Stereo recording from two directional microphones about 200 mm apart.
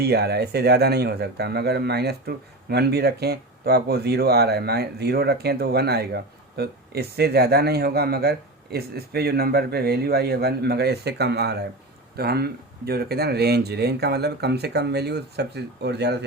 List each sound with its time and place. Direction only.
0.0 s speech: 55° right (ahead or behind)